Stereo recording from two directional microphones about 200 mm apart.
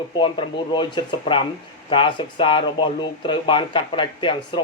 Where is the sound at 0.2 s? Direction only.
25° left (ahead or behind).